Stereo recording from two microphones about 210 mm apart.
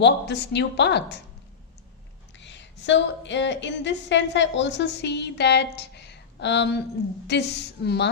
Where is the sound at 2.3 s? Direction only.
60° left (ahead or behind).